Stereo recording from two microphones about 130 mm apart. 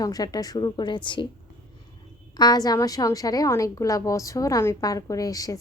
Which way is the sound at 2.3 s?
30° left (ahead or behind).